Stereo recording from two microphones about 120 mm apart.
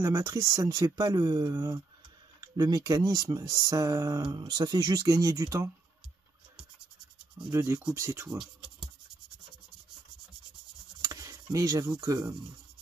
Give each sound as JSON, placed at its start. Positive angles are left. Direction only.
{"t": 0.0, "sound": "speech", "side_deg": -25}
{"t": 7.5, "sound": "speech", "side_deg": -20}
{"t": 11.0, "sound": "speech", "side_deg": -30}